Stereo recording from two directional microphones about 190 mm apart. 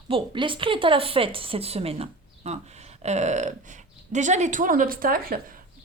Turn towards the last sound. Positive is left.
turn(degrees=-50)  # may be behind; listen again after turning